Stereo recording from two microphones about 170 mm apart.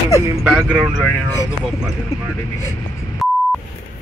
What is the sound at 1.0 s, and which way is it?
Speech, 10° left (ahead or behind).